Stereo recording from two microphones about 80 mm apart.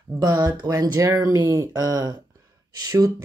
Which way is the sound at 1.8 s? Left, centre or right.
Right.